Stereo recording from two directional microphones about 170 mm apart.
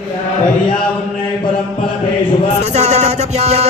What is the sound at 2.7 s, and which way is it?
Music, 40° right (ahead or behind).